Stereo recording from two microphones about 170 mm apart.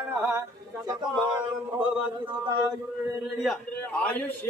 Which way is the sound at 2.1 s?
30° right (ahead or behind).